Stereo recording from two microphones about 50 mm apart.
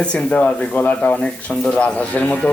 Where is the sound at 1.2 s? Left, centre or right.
Left.